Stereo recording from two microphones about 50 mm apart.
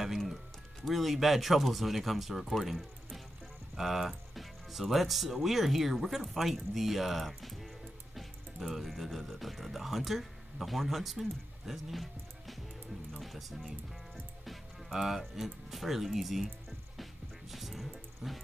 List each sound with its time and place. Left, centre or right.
0.8 s speech: centre
14.9 s speech: centre
16.9 s music: centre